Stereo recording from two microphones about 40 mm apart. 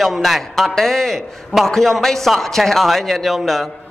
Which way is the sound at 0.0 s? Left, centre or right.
Centre.